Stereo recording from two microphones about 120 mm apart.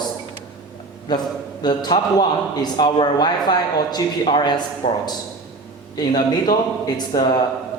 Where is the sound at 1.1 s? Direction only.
35° left (ahead or behind).